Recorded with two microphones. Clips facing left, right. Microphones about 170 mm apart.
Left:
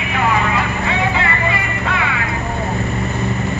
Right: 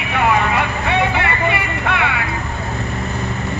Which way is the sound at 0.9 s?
65° right (ahead or behind).